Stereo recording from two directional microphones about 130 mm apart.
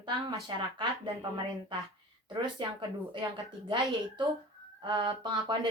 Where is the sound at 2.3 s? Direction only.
35° right (ahead or behind).